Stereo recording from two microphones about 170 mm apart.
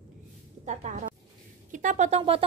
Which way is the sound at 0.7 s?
45° right (ahead or behind).